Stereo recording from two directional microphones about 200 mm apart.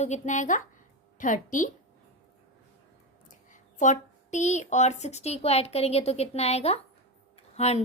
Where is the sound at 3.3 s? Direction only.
40° left (ahead or behind).